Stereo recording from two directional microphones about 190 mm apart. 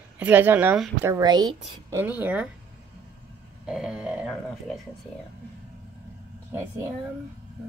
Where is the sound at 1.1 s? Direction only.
20° right (ahead or behind).